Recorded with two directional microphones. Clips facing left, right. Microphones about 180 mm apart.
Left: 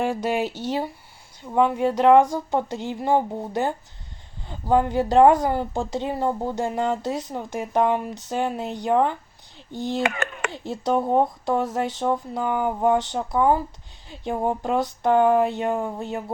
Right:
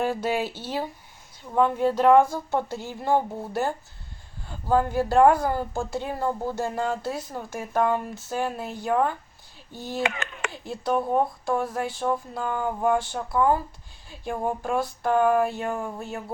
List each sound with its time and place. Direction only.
0.0 s speech: 15° left (ahead or behind)
10.0 s a child's voice: 50° left (ahead or behind)
10.5 s speech: 25° left (ahead or behind)